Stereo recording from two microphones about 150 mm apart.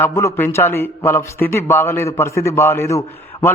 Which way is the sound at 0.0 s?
20° left (ahead or behind).